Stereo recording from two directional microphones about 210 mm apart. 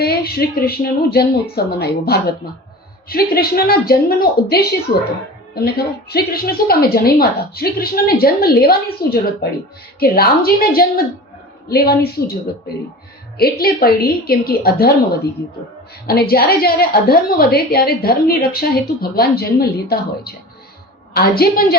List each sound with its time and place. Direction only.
0.0 s a woman's voice: 45° left (ahead or behind)
13.4 s a woman's voice: 45° left (ahead or behind)
16.0 s a woman's voice: 45° left (ahead or behind)